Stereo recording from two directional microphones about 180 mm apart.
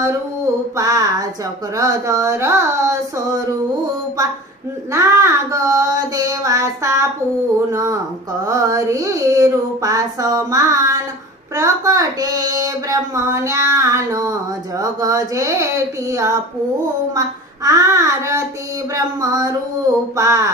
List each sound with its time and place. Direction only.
0.8 s child singing: 20° right (ahead or behind)
1.7 s speech: 20° right (ahead or behind)
4.9 s speech: 15° right (ahead or behind)
8.4 s child singing: 20° right (ahead or behind)
11.5 s speech: 20° right (ahead or behind)
18.9 s child singing: 20° right (ahead or behind)
20.1 s speech: 15° right (ahead or behind)